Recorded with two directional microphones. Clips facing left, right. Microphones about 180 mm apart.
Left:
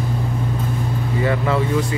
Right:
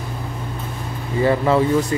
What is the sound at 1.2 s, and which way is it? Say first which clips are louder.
Speech: right 4 dB; 30° right (ahead or behind).